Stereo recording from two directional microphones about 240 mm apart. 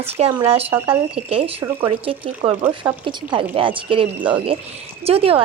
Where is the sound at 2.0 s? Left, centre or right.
Right.